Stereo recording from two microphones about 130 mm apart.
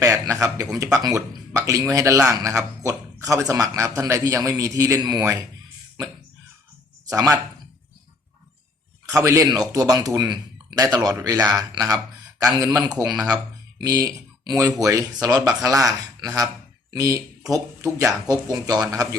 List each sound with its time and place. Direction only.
0.0 s speech: 25° right (ahead or behind)
7.1 s speech: 25° right (ahead or behind)
9.0 s speech: 25° right (ahead or behind)
13.2 s speech: 30° right (ahead or behind)